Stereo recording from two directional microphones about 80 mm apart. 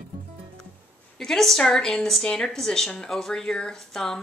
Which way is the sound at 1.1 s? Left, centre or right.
Centre.